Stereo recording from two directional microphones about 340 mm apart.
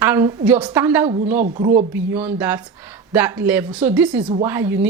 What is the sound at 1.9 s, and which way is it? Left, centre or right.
Speech, centre.